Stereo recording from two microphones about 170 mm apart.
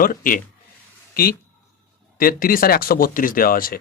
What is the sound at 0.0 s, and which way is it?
Speech, 55° left (ahead or behind).